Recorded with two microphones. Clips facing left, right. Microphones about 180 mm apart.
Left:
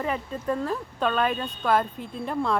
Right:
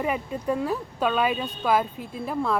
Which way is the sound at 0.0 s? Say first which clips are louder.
Right 2 dB; 10° right (ahead or behind).